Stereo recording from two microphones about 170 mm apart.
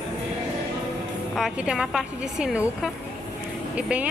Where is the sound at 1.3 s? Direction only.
Centre (ahead or behind).